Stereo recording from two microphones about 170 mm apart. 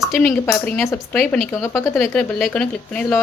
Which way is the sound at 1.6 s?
15° left (ahead or behind).